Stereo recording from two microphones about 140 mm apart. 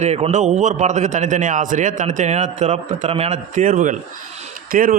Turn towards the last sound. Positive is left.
turn(degrees=-85)